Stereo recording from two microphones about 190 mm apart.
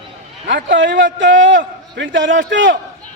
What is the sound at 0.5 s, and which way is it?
A man's voice, 70° right (ahead or behind).